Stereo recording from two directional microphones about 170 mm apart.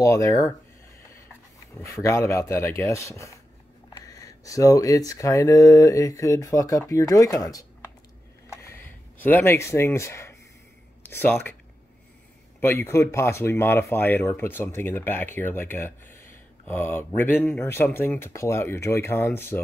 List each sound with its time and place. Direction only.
0.0 s speech: 20° left (ahead or behind)
1.9 s speech: 15° left (ahead or behind)
8.5 s a sound: 15° left (ahead or behind)
11.1 s speech: 15° left (ahead or behind)
12.5 s speech: 15° left (ahead or behind)